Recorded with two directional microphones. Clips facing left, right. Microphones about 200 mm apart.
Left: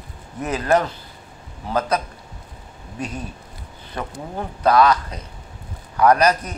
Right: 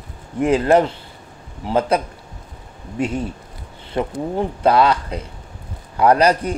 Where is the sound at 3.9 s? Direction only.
25° right (ahead or behind).